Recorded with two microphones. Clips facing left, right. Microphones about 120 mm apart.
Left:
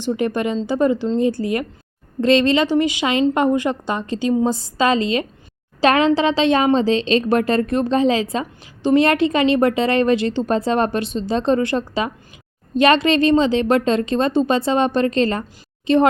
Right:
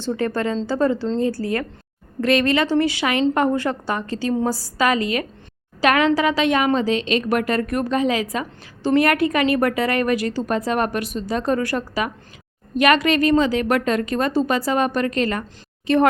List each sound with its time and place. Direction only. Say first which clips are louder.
0.0 s a woman's voice: left 2 dB; 15° left (ahead or behind)